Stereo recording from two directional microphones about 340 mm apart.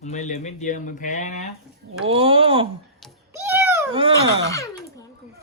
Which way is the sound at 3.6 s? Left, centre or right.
Centre.